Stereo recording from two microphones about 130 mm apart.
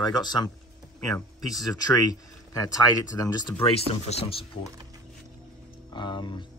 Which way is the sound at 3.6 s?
50° left (ahead or behind).